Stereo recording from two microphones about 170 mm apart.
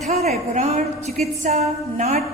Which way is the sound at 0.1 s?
40° right (ahead or behind).